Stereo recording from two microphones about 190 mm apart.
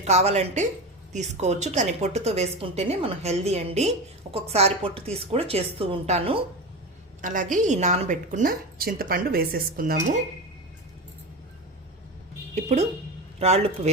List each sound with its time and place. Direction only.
0.0 s a woman's voice: 35° right (ahead or behind)
7.2 s a woman's voice: 45° right (ahead or behind)
12.5 s a woman's voice: 35° right (ahead or behind)